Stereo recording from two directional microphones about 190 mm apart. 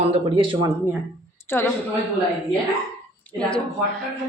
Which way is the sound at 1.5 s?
10° left (ahead or behind).